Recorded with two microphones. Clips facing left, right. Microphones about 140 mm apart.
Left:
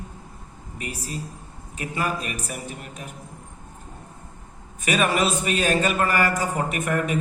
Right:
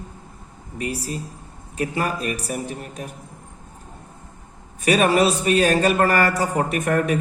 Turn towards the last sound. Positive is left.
turn(degrees=-40)  # may be behind; listen again after turning